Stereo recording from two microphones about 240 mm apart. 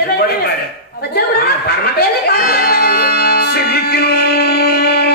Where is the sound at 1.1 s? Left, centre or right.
Left.